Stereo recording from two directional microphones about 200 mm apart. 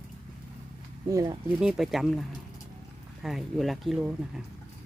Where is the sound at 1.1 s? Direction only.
15° right (ahead or behind).